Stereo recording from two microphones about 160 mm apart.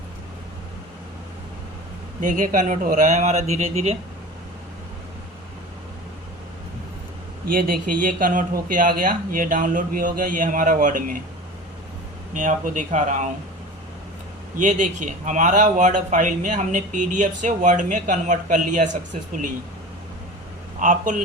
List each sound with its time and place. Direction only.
2.2 s speech: 55° right (ahead or behind)
7.5 s speech: 60° right (ahead or behind)
12.3 s speech: 50° right (ahead or behind)
14.6 s speech: 50° right (ahead or behind)
20.8 s speech: 50° right (ahead or behind)